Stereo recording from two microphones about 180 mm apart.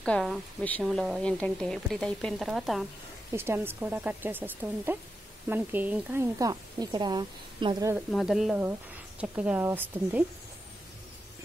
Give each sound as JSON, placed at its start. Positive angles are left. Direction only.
{"t": 0.0, "sound": "speech", "side_deg": 5}
{"t": 3.3, "sound": "speech", "side_deg": -15}
{"t": 8.1, "sound": "speech", "side_deg": 0}